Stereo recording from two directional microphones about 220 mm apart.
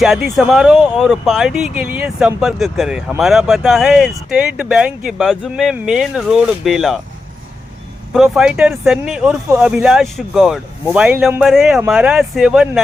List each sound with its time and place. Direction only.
0.0 s speech: centre (ahead or behind)
8.1 s speech: centre (ahead or behind)